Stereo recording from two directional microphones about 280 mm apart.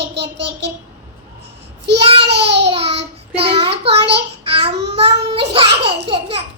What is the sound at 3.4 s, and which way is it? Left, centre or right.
Child singing, centre.